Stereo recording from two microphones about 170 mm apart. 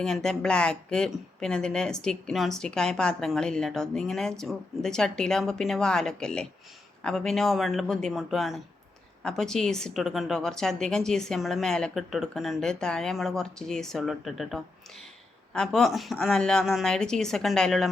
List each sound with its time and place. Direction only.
0.0 s speech: 5° left (ahead or behind)